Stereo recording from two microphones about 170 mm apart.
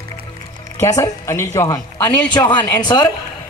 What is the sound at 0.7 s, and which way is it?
A man's voice, 20° left (ahead or behind).